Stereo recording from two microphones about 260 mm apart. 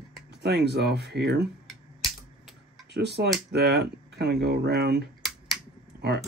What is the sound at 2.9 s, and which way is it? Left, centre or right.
Speech, right.